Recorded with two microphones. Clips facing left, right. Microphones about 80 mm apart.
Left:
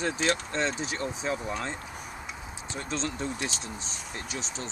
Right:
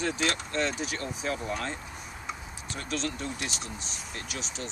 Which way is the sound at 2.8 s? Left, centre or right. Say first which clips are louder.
Left 1 dB; left.